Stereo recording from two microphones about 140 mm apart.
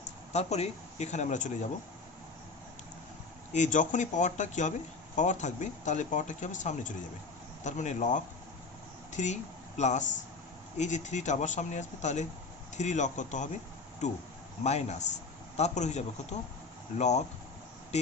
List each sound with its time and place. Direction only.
0.3 s speech: 50° left (ahead or behind)
3.5 s speech: 60° left (ahead or behind)
14.6 s speech: 50° left (ahead or behind)